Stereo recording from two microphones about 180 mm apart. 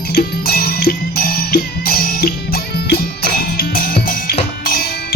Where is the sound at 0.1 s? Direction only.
60° left (ahead or behind).